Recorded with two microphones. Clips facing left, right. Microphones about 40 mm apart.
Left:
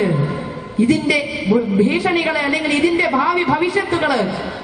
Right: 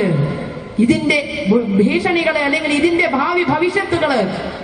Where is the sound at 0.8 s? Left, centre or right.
Right.